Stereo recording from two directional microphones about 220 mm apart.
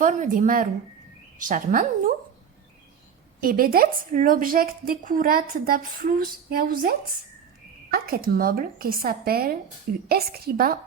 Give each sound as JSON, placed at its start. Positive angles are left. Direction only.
{"t": 0.0, "sound": "speech", "side_deg": -35}
{"t": 3.4, "sound": "speech", "side_deg": -40}